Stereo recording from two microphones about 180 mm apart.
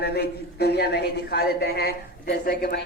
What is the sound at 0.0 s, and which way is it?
A woman's voice, 60° left (ahead or behind).